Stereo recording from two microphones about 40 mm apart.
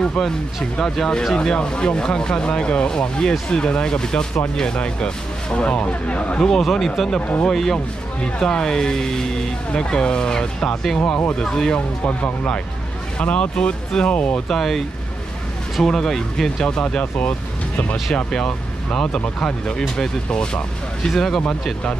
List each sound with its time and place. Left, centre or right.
0.7 s speech: centre
6.4 s speech: centre
7.2 s speech: left
7.4 s speech: centre
12.0 s speech: left
14.5 s speech: centre
15.8 s speech: centre
16.7 s speech: left
17.0 s speech: left
18.1 s speech: left
21.1 s speech: centre